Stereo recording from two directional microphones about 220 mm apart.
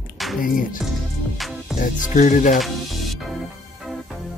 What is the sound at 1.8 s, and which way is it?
Speech, 35° left (ahead or behind).